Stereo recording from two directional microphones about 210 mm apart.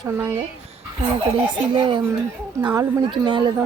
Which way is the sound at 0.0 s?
10° right (ahead or behind).